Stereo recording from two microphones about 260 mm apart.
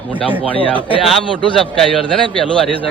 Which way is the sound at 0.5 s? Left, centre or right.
Centre.